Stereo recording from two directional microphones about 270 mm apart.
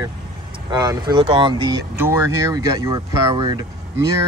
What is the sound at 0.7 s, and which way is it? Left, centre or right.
Speech, centre.